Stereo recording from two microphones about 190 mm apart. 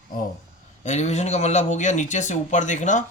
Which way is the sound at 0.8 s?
35° left (ahead or behind).